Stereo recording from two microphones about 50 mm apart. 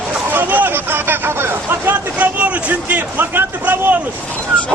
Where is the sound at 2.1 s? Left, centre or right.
Right.